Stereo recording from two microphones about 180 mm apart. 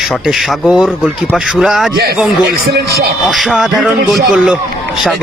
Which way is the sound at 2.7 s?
60° right (ahead or behind).